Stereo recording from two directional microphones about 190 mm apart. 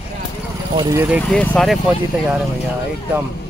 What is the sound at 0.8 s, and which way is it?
Speech, 15° right (ahead or behind).